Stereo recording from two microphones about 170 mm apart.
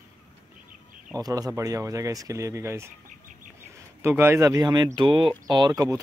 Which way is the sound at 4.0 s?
15° right (ahead or behind).